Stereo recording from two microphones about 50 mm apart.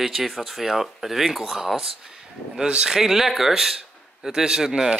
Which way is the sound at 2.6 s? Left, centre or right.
Centre.